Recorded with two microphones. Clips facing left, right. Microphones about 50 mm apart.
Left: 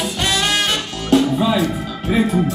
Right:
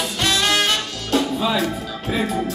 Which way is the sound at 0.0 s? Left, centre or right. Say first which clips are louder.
Left 1 dB; centre.